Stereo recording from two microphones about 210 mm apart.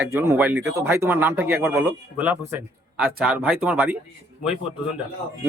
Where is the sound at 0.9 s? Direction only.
10° right (ahead or behind).